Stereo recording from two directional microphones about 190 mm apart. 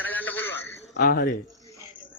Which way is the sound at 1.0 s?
50° left (ahead or behind).